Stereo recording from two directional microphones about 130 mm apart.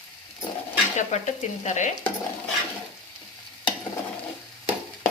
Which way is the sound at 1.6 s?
65° left (ahead or behind).